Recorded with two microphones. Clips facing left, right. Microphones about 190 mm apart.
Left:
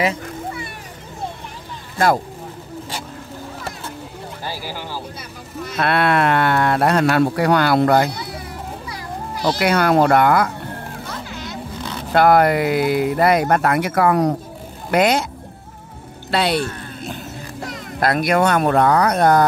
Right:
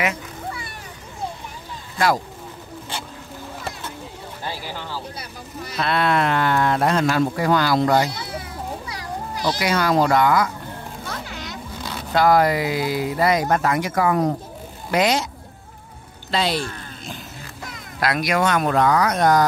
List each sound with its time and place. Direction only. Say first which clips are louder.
0.0 s vehicle: left 4 dB; 30° left (ahead or behind)
4.5 s speech: left 1 dB; 10° left (ahead or behind)
5.8 s speech: left 3 dB; 65° left (ahead or behind)
9.4 s speech: left 4 dB; 55° left (ahead or behind)
12.1 s speech: left 3 dB; 60° left (ahead or behind)
14.9 s speech: left 3 dB; 55° left (ahead or behind)
16.3 s speech: left 3 dB; 65° left (ahead or behind)
18.0 s speech: left 4 dB; 50° left (ahead or behind)